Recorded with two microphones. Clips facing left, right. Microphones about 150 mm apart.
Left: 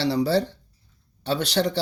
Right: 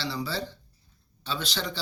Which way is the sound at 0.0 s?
70° left (ahead or behind).